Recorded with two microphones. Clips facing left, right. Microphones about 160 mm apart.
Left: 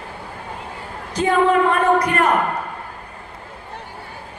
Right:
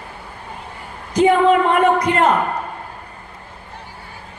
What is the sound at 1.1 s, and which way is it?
Speech, 20° right (ahead or behind).